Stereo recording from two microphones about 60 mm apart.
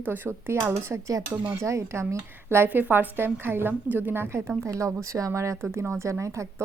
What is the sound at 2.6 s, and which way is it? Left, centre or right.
A woman's voice, right.